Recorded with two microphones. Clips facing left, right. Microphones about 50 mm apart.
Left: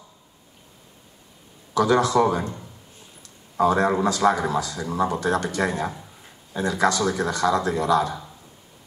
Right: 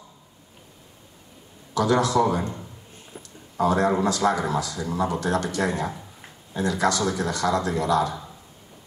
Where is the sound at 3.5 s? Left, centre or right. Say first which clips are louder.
Left 1 dB; left.